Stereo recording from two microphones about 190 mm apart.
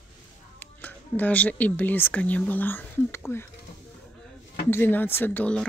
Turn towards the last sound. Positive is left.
turn(degrees=10)  # may be behind; listen again after turning